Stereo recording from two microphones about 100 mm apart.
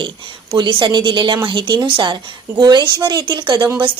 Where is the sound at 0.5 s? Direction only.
50° right (ahead or behind).